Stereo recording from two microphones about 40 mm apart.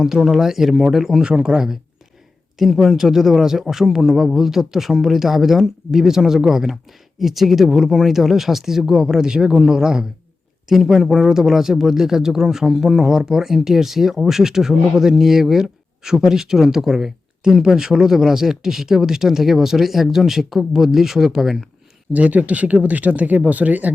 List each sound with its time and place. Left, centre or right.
0.0 s speech: centre
1.2 s speech: right; by 21.7 s centre
22.1 s speech: right